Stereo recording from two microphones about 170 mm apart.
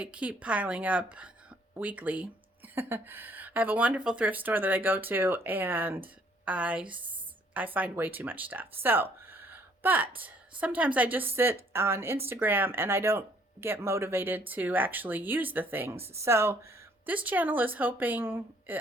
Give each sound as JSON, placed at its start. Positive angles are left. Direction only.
{"t": 0.0, "sound": "a woman's voice", "side_deg": -5}